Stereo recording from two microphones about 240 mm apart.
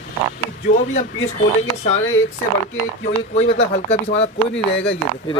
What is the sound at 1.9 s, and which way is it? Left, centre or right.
Speech, left.